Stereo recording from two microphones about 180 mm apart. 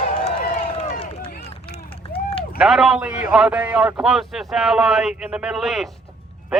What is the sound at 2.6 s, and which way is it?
Speech, 5° right (ahead or behind).